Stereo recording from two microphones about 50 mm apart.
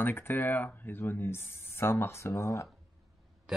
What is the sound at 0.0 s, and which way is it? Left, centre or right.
Speech, left.